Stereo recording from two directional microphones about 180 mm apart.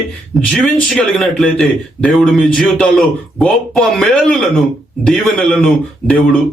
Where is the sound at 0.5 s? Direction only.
Centre (ahead or behind).